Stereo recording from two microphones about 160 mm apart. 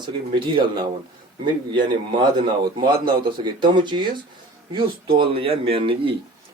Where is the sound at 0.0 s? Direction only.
30° right (ahead or behind).